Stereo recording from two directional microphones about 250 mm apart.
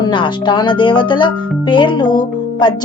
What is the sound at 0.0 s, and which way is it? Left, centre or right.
Speech, centre.